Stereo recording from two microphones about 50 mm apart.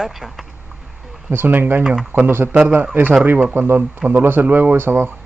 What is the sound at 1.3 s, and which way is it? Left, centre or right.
Speech, right.